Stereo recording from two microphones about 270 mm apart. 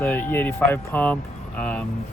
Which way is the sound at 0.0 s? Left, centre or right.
Centre.